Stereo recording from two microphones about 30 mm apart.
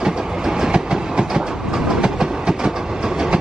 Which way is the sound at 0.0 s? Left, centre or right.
Centre.